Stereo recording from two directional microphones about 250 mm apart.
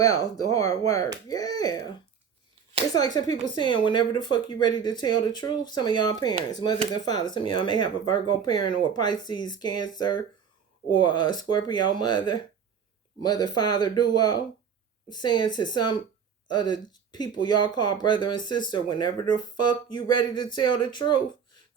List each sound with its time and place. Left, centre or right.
0.0 s speech: centre
2.9 s speech: centre